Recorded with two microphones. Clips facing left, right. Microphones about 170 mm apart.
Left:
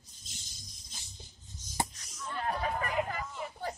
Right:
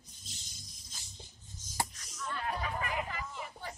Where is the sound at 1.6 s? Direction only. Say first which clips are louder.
Left 2 dB; 45° right (ahead or behind).